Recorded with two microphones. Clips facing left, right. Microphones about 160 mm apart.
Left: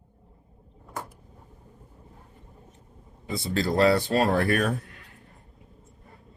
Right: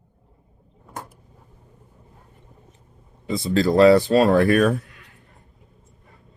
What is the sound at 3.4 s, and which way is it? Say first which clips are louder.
Speech: right 7 dB; 90° right.